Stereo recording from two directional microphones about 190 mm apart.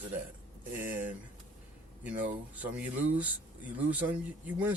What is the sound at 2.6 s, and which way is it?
Speech, 10° right (ahead or behind).